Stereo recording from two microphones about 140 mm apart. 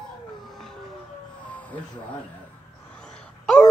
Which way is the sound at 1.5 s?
10° left (ahead or behind).